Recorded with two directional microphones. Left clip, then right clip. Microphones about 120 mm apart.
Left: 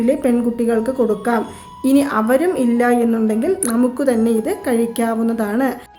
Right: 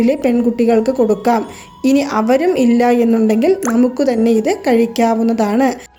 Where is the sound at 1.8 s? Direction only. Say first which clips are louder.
Right 1 dB; 25° right (ahead or behind).